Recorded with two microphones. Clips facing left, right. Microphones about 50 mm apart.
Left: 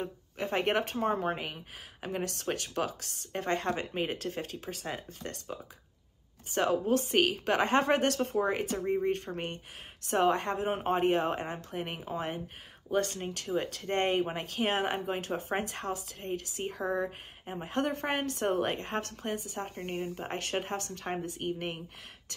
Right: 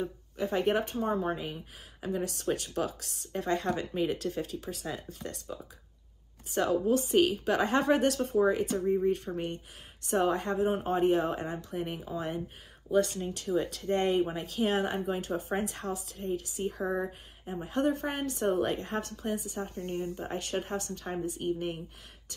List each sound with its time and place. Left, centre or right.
0.0 s a woman's voice: left